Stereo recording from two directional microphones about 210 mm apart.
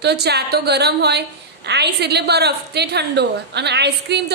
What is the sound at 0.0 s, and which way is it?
A woman's voice, 50° right (ahead or behind).